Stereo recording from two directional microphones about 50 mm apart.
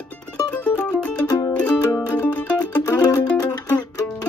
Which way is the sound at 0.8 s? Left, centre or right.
Left.